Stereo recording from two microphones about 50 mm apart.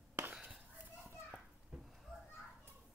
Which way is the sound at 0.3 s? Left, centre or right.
Right.